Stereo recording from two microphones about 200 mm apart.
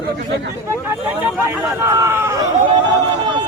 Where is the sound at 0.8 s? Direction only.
10° right (ahead or behind).